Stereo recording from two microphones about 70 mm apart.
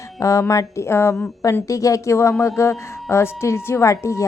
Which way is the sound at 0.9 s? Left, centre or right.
Left.